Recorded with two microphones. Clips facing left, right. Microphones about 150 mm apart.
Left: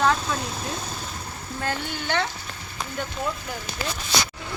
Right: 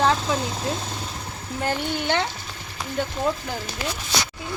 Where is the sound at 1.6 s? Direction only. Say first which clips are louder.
Right 4 dB; 20° right (ahead or behind).